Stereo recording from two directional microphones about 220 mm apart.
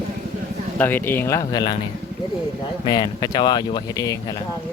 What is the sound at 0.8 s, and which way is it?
Speech, 10° left (ahead or behind).